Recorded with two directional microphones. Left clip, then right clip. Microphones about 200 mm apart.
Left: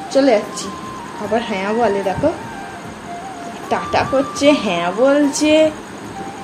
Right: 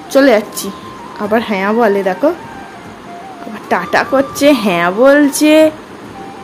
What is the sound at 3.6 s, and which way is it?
A woman's voice, 40° right (ahead or behind).